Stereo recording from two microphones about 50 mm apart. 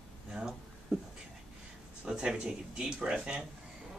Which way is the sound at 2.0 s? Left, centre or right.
Centre.